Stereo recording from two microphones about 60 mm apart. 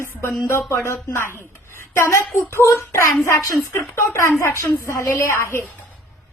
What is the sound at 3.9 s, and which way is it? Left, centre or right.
A woman's voice, left.